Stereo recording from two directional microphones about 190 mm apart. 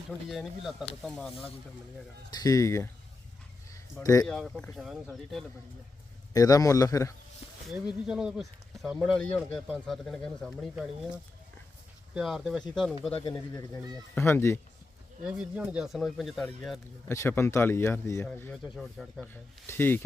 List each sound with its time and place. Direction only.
0.3 s speech: centre (ahead or behind)
2.3 s speech: 20° left (ahead or behind)
4.0 s speech: 20° left (ahead or behind)
4.3 s speech: 5° left (ahead or behind)
6.3 s speech: 20° left (ahead or behind)
7.7 s speech: 5° right (ahead or behind)
13.1 s speech: 20° left (ahead or behind)
15.2 s speech: 5° right (ahead or behind)
17.1 s speech: 15° left (ahead or behind)
18.5 s speech: centre (ahead or behind)
19.3 s speech: 10° left (ahead or behind)